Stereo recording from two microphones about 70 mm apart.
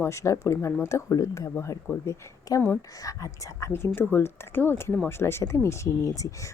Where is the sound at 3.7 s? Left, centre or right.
Left.